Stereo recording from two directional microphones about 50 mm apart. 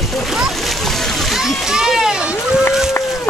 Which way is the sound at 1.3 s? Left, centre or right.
Centre.